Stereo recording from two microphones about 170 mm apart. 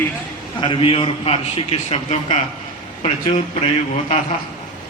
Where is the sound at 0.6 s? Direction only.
30° left (ahead or behind).